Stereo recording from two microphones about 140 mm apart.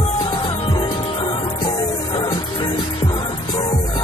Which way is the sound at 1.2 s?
40° left (ahead or behind).